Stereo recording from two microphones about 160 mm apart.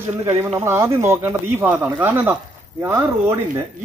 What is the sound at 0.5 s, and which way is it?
Speech, 15° right (ahead or behind).